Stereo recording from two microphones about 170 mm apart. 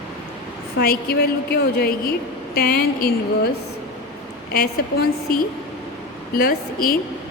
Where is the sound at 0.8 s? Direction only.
65° left (ahead or behind).